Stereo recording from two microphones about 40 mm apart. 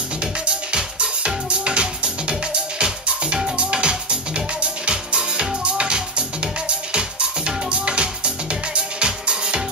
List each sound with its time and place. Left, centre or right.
0.2 s music: right